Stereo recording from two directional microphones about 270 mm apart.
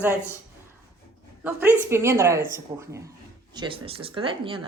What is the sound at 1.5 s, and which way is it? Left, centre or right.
Speech, centre.